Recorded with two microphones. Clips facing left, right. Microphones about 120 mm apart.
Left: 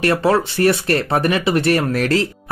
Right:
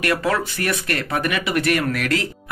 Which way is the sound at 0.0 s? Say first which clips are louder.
Left 5 dB; 30° left (ahead or behind).